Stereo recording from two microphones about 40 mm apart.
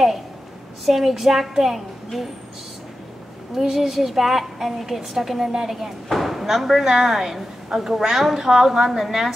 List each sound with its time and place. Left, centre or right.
0.8 s a woman's voice: centre
3.5 s a woman's voice: centre